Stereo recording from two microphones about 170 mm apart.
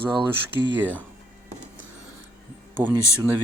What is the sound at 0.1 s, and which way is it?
Speech, 30° right (ahead or behind).